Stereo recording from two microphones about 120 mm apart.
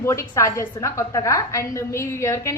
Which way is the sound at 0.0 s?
25° left (ahead or behind).